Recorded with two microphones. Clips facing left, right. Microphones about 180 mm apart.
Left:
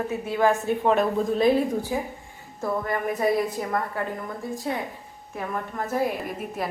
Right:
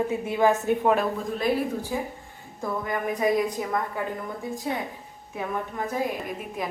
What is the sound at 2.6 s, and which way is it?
Speech, centre (ahead or behind).